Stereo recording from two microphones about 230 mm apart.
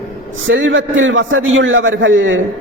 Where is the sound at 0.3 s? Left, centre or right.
Right.